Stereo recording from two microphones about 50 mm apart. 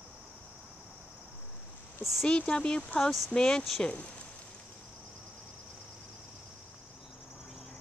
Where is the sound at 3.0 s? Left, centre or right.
Centre.